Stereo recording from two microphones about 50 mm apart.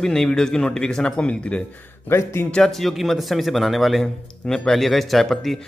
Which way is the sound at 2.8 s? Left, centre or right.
Centre.